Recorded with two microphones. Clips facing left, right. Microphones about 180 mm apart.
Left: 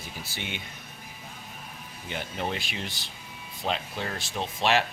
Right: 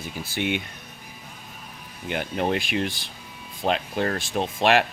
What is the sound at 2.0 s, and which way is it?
Speech, 60° right (ahead or behind).